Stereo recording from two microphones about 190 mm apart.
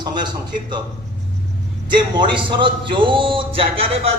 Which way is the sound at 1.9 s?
25° right (ahead or behind).